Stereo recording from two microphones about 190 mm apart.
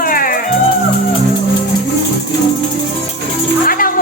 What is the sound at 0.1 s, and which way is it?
Music, 45° left (ahead or behind).